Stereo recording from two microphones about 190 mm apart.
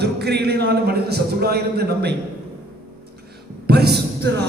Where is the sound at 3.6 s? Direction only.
55° right (ahead or behind).